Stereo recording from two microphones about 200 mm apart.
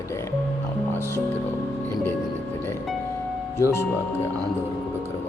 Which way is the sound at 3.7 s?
10° left (ahead or behind).